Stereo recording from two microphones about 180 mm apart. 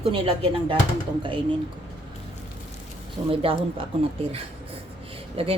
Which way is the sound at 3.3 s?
30° right (ahead or behind).